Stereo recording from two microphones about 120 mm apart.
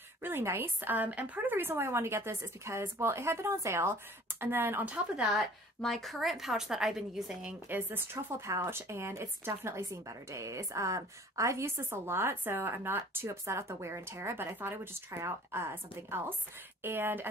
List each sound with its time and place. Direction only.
0.2 s speech: 20° right (ahead or behind); by 7.5 s 5° right (ahead or behind)
7.6 s speech: 15° right (ahead or behind)